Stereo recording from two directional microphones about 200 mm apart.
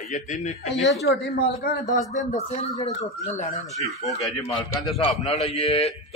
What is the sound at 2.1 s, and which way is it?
Speech, 35° left (ahead or behind).